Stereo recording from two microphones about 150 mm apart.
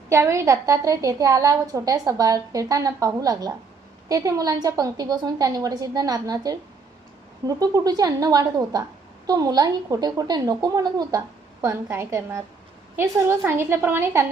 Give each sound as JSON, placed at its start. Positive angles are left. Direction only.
{"t": 0.1, "sound": "a woman's voice", "side_deg": -20}